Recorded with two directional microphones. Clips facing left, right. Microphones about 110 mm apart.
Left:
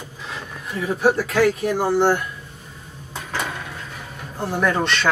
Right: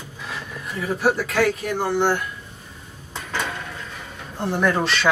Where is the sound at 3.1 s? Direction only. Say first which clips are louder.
Even; 10° left (ahead or behind).